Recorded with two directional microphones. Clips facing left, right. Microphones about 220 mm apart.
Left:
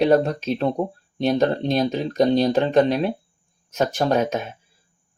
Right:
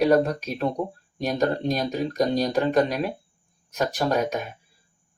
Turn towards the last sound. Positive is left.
turn(degrees=25)  # may be behind; listen again after turning